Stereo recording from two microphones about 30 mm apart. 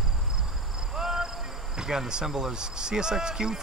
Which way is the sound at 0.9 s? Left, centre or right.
Centre.